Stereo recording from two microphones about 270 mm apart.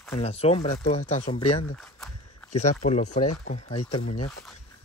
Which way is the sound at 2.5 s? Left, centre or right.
Left.